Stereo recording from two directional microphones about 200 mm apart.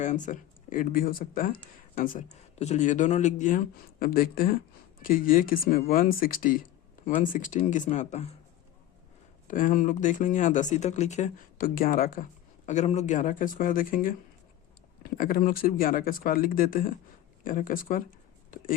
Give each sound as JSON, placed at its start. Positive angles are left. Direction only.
{"t": 0.0, "sound": "speech", "side_deg": 40}
{"t": 9.5, "sound": "speech", "side_deg": 40}
{"t": 12.6, "sound": "speech", "side_deg": 35}
{"t": 15.2, "sound": "speech", "side_deg": 45}